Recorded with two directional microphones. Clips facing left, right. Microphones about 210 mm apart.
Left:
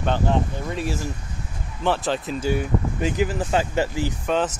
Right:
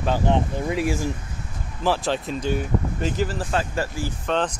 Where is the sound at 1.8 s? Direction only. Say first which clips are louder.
Even; centre (ahead or behind).